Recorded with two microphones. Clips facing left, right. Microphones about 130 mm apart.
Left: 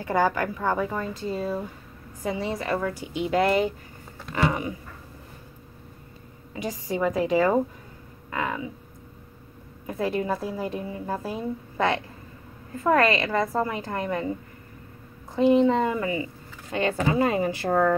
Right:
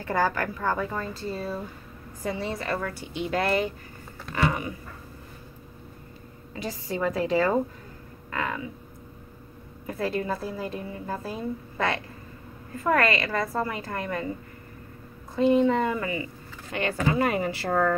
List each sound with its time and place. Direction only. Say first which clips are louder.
0.0 s a woman's voice: left 2 dB; 15° left (ahead or behind)
6.5 s a woman's voice: left 2 dB; 15° left (ahead or behind)
9.8 s a woman's voice: left 2 dB; 15° left (ahead or behind)
15.3 s a woman's voice: left 2 dB; 20° left (ahead or behind)